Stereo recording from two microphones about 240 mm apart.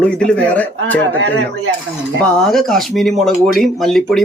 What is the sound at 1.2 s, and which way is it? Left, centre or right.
Speech, right.